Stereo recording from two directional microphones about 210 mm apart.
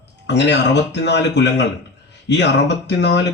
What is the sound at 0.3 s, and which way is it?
A man's voice, 55° left (ahead or behind).